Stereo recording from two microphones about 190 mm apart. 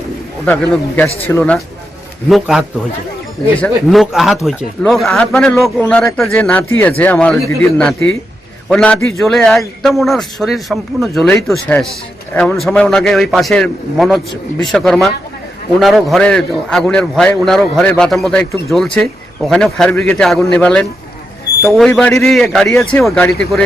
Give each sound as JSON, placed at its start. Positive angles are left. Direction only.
{"t": 0.4, "sound": "a man's voice", "side_deg": 10}
{"t": 2.3, "sound": "a man's voice", "side_deg": 0}